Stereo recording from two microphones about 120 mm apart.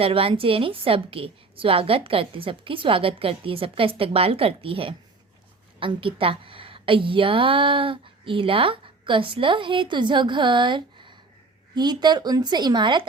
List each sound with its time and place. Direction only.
0.0 s a woman's voice: 50° right (ahead or behind)